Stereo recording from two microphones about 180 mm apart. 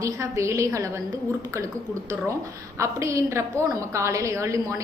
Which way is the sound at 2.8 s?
15° right (ahead or behind).